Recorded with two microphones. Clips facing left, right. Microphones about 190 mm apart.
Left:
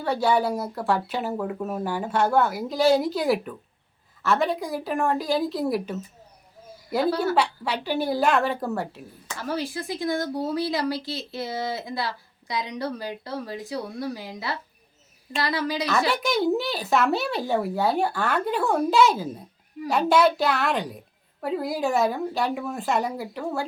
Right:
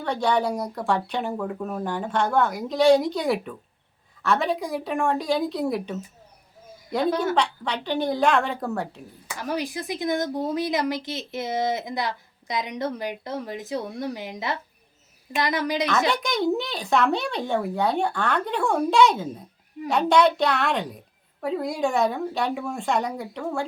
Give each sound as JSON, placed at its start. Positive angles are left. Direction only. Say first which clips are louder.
{"t": 0.0, "sound": "speech", "louder": "left 1 dB", "side_deg": 5}
{"t": 7.3, "sound": "speech", "louder": "left 1 dB", "side_deg": 5}
{"t": 9.2, "sound": "speech", "louder": "right 1 dB", "side_deg": -15}
{"t": 16.0, "sound": "speech", "louder": "even", "side_deg": 5}